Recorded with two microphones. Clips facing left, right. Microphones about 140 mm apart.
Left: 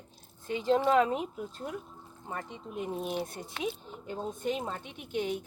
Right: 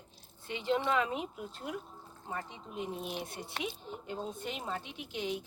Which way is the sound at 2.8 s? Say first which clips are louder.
Left 6 dB; 45° left (ahead or behind).